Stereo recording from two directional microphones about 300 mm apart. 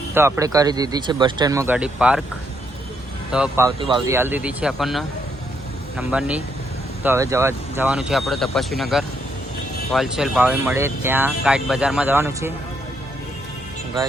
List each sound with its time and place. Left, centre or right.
0.1 s speech: centre
3.3 s speech: centre